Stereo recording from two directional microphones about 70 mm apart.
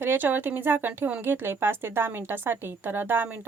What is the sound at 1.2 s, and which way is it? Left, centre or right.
A woman's voice, right.